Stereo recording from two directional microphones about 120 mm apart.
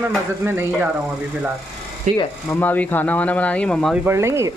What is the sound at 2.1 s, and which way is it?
Speech, 75° right (ahead or behind).